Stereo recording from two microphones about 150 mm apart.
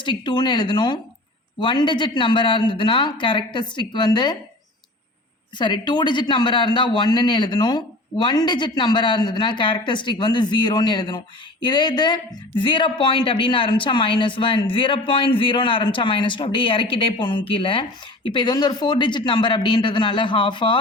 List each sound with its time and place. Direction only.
0.0 s speech: 30° left (ahead or behind)
5.5 s speech: 30° left (ahead or behind)